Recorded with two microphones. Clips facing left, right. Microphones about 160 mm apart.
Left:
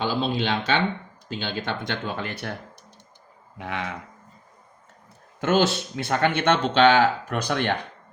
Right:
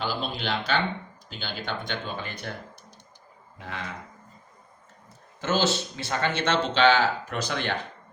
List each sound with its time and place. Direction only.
0.2 s a sound: 90° left
1.3 s speech: 90° left; by 2.5 s 75° left (ahead or behind)
3.6 s speech: 65° left (ahead or behind)
5.4 s speech: 60° left (ahead or behind)